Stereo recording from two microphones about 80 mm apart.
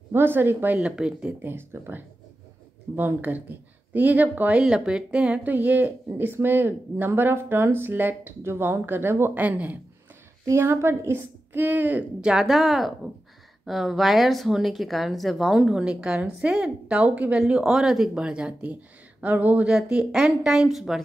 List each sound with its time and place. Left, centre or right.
0.1 s speech: right
0.7 s speech: centre
1.4 s speech: right
10.4 s speech: right
12.2 s speech: centre